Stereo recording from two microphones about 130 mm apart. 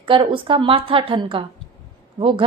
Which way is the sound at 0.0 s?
40° right (ahead or behind).